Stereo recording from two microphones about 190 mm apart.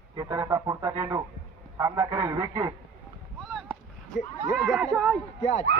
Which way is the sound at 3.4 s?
Centre (ahead or behind).